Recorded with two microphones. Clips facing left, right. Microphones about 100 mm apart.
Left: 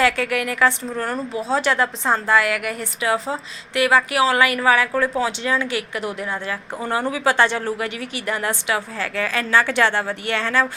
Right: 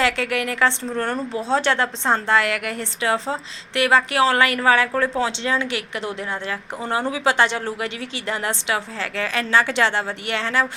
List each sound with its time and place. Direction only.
0.0 s a woman's voice: 25° right (ahead or behind)